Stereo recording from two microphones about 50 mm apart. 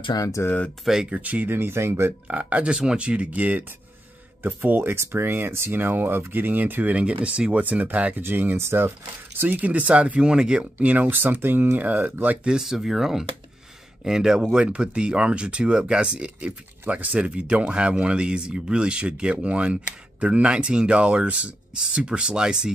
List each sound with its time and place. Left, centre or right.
0.4 s speech: left
1.1 s speech: right
1.5 s speech: right
2.2 s speech: right
4.9 s speech: right
8.2 s speech: right
9.4 s speech: right
12.4 s speech: centre